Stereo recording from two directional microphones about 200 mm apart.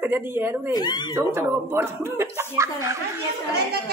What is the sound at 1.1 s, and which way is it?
Speech, 10° right (ahead or behind).